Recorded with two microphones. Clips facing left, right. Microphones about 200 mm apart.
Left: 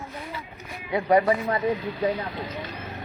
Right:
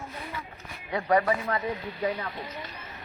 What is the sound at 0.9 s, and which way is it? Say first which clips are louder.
Speech: left 4 dB; 25° left (ahead or behind).